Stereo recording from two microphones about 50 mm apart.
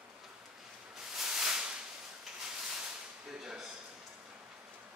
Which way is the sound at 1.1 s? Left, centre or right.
Centre.